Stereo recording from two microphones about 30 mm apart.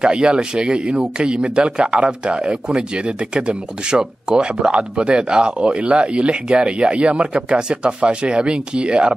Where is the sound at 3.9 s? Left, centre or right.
Right.